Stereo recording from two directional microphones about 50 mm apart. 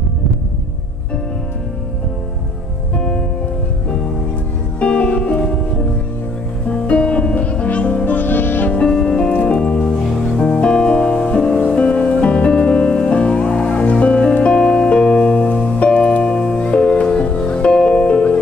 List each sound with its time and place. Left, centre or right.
3.0 s music: left
4.7 s music: left
6.7 s music: centre
8.1 s music: left
8.7 s music: centre
9.3 s music: left